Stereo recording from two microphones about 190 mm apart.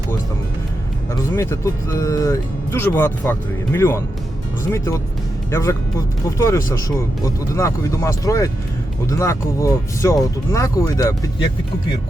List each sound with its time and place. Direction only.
1.4 s speech: 15° left (ahead or behind)
5.5 s speech: 15° left (ahead or behind)